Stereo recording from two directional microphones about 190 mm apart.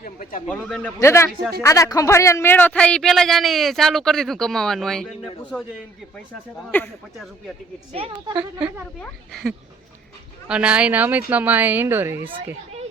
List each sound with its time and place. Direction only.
0.0 s speech: 45° left (ahead or behind)
0.4 s speech: 5° left (ahead or behind)
6.7 s speech: 10° left (ahead or behind)
7.9 s a woman's voice: 30° right (ahead or behind)
9.0 s speech: centre (ahead or behind)